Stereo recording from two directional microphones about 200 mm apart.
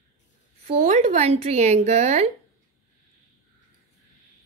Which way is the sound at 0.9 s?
35° right (ahead or behind).